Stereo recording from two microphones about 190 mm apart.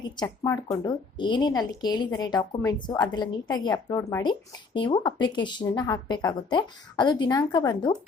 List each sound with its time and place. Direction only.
0.2 s speech: 20° left (ahead or behind)